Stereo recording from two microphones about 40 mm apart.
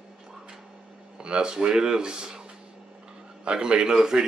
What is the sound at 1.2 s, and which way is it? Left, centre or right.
Speech, right.